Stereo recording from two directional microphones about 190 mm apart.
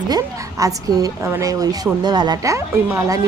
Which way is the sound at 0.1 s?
20° right (ahead or behind).